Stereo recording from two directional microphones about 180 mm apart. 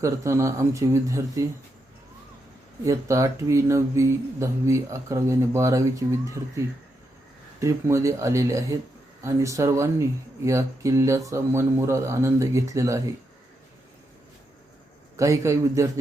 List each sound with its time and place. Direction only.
0.0 s speech: 15° right (ahead or behind)
2.8 s speech: 15° right (ahead or behind)
7.6 s speech: 15° right (ahead or behind)
15.1 s speech: 15° right (ahead or behind)